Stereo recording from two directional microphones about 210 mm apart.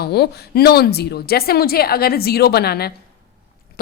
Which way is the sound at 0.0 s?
50° left (ahead or behind).